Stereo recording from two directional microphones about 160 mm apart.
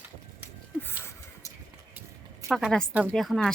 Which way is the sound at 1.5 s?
15° right (ahead or behind).